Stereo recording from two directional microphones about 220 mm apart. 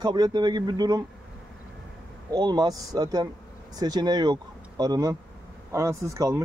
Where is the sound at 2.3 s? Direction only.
20° right (ahead or behind).